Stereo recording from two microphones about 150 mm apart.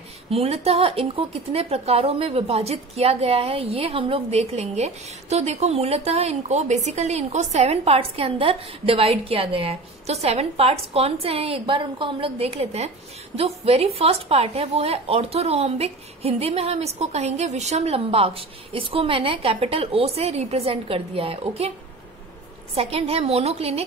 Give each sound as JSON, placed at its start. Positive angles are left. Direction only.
{"t": 0.3, "sound": "a woman's voice", "side_deg": -45}
{"t": 22.8, "sound": "speech", "side_deg": -40}